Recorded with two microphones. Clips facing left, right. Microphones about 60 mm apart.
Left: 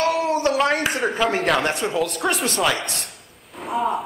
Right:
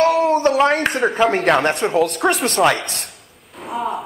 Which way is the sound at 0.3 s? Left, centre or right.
Right.